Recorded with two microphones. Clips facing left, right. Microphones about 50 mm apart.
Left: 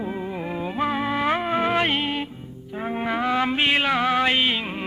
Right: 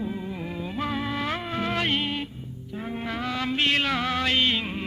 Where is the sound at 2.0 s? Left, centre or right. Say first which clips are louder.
Left 3 dB; centre.